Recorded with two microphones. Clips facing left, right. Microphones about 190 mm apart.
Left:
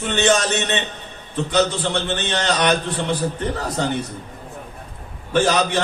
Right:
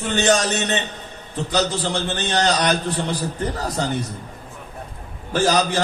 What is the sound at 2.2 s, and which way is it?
Speech, 40° right (ahead or behind).